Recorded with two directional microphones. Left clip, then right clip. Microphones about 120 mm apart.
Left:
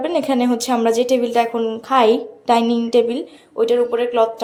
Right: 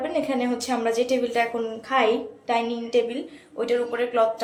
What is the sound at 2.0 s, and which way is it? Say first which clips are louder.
A woman's voice: left 8 dB; 80° left.